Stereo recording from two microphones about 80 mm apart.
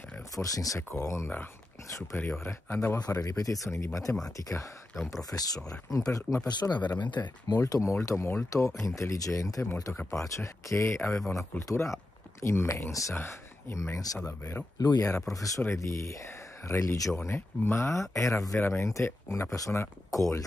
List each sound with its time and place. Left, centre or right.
0.4 s speech: left
2.4 s speech: left
3.1 s speech: left
7.6 s speech: left